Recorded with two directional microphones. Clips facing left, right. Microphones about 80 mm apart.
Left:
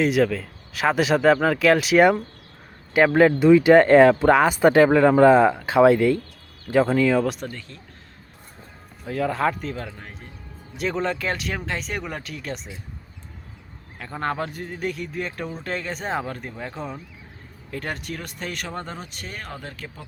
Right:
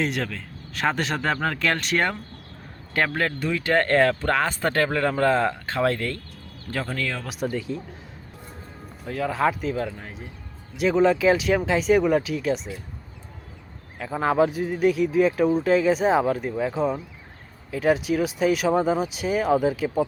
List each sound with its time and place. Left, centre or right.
0.0 s speech: centre
7.3 s speech: centre
9.0 s speech: centre
14.0 s speech: centre